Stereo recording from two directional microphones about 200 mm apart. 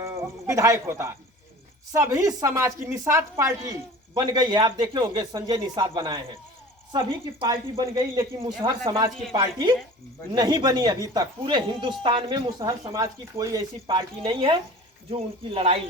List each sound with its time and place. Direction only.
0.0 s a woman's voice: 15° right (ahead or behind)
7.9 s a woman's voice: 25° right (ahead or behind)